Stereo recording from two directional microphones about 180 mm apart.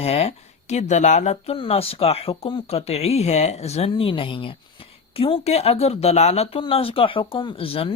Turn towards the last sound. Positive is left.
turn(degrees=30)  # may be behind; listen again after turning